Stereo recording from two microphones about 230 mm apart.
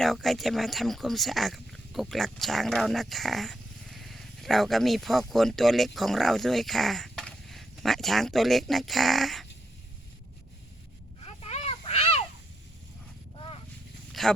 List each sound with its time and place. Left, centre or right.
0.0 s speech: centre
11.2 s a sound: left
14.1 s dog: centre